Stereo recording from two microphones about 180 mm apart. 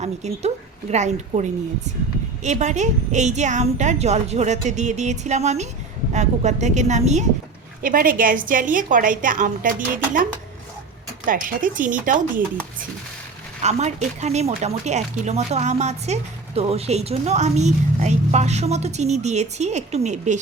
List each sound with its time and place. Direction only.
0.0 s a woman's voice: 35° right (ahead or behind)
7.8 s a woman's voice: 50° right (ahead or behind)
11.3 s a woman's voice: 50° right (ahead or behind)
13.6 s a woman's voice: 40° right (ahead or behind)